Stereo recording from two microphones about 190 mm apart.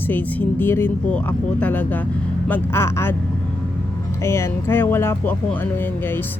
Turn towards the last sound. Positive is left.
turn(degrees=10)  # may be behind; listen again after turning